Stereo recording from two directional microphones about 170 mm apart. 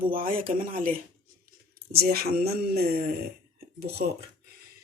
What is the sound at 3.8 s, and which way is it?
Speech, 65° right (ahead or behind).